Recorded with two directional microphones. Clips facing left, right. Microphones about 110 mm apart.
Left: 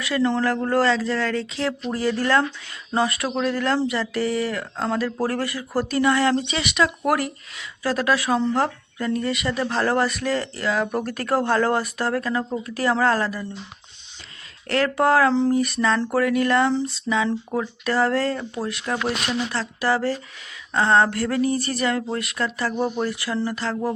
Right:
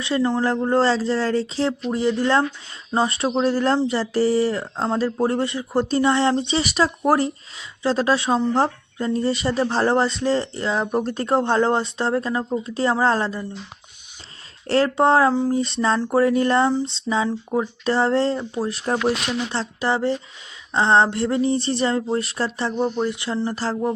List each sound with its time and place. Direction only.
0.2 s speech: 15° right (ahead or behind)
0.4 s speech: 25° right (ahead or behind)
1.9 s speech: 20° right (ahead or behind)
14.7 s speech: 25° right (ahead or behind)
15.3 s speech: 10° right (ahead or behind)
15.5 s speech: 25° right (ahead or behind)
18.7 s speech: 35° right (ahead or behind)
19.5 s speech: 25° right (ahead or behind)
22.7 s speech: 5° left (ahead or behind)
23.0 s speech: 20° right (ahead or behind)